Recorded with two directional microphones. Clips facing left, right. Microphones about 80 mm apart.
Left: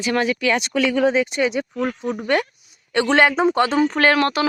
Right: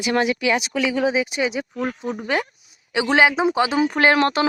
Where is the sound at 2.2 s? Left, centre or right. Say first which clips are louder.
Left 4 dB; centre.